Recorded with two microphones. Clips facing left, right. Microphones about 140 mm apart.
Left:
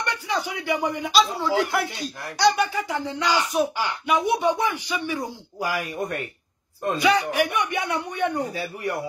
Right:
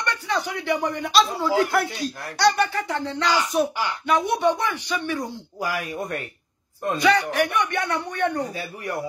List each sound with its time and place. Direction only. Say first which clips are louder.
0.0 s speech: right 1 dB; 5° left (ahead or behind)
5.6 s speech: left 1 dB; 25° left (ahead or behind)
7.0 s speech: right 1 dB; 5° left (ahead or behind)